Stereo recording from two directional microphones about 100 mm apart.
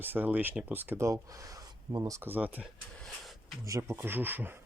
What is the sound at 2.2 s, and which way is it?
Speech, 15° right (ahead or behind).